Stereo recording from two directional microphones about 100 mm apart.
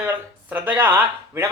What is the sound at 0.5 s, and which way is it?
Speech, 20° right (ahead or behind).